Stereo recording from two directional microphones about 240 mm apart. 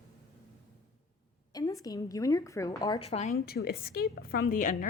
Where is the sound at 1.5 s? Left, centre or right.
Centre.